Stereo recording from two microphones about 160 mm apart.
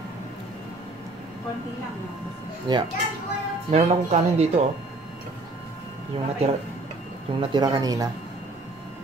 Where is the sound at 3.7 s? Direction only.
45° right (ahead or behind).